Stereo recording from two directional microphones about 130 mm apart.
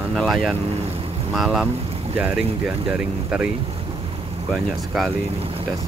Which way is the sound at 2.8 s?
5° right (ahead or behind).